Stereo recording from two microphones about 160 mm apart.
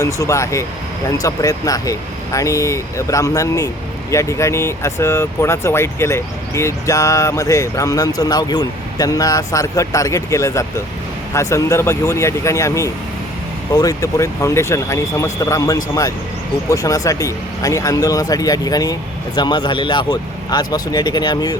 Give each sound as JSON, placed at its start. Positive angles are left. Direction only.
{"t": 0.0, "sound": "speech", "side_deg": 20}